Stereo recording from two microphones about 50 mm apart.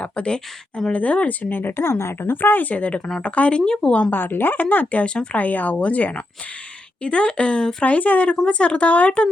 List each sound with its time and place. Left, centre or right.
0.0 s a woman's voice: left
2.3 s a woman's voice: left; by 4.1 s centre
4.1 s a woman's voice: left; by 7.9 s centre
7.9 s speech: left